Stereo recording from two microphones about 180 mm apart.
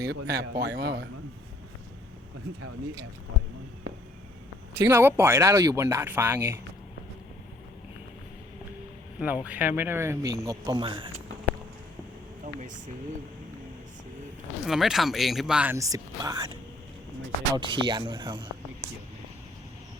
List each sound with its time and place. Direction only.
0.0 s a man's voice: 65° right (ahead or behind)
4.9 s speech: 10° right (ahead or behind)
9.2 s speech: 10° right (ahead or behind); by 11.1 s 25° right (ahead or behind)
14.7 s speech: centre (ahead or behind); by 16.5 s 20° right (ahead or behind)
17.5 s speech: 25° right (ahead or behind)